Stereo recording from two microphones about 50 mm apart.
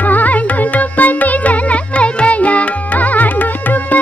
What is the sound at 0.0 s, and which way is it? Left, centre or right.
Carnatic music, left.